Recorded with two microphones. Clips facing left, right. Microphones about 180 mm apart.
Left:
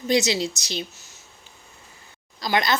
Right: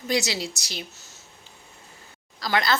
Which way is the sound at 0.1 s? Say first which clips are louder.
Left 5 dB; 20° left (ahead or behind).